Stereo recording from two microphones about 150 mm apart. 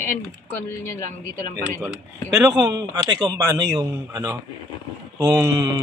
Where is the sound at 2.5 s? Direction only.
25° right (ahead or behind).